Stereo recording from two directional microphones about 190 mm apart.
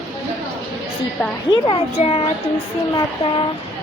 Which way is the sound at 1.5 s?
30° left (ahead or behind).